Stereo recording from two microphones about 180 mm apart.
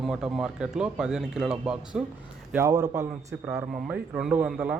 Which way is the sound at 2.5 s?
20° right (ahead or behind).